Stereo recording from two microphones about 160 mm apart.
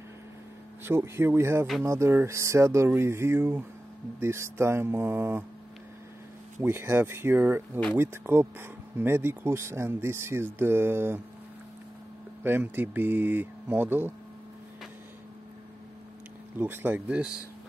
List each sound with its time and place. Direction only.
0.8 s speech: 15° right (ahead or behind)
6.6 s speech: 15° right (ahead or behind)
12.4 s speech: 10° right (ahead or behind)
16.5 s speech: 15° right (ahead or behind)